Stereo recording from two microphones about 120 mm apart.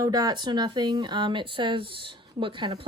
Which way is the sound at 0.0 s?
30° right (ahead or behind).